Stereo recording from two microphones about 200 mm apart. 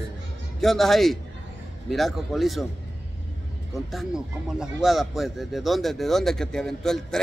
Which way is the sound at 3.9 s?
Centre (ahead or behind).